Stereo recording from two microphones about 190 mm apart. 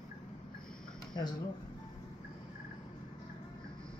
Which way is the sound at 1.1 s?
20° left (ahead or behind).